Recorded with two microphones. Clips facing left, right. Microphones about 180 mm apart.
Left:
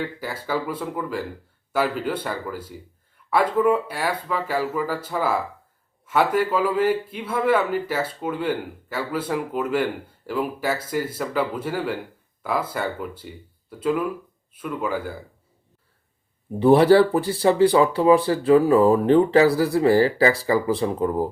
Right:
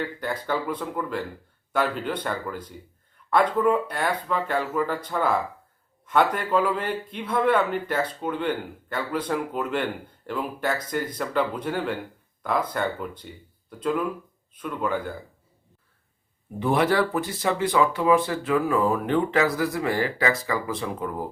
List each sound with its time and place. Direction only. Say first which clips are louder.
0.0 s speech: even; 5° left (ahead or behind)
16.6 s speech: left 8 dB; 30° left (ahead or behind)